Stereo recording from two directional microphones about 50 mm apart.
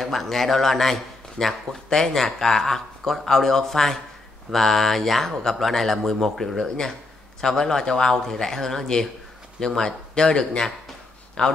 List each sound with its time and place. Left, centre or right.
0.0 s a man's voice: centre